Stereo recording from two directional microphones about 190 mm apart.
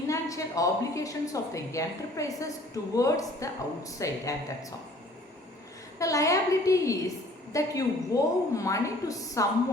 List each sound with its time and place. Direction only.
0.1 s a woman's voice: 15° left (ahead or behind)
6.0 s a woman's voice: 15° left (ahead or behind)